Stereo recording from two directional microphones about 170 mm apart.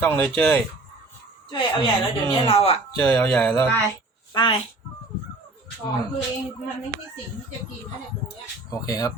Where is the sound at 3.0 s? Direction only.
10° left (ahead or behind).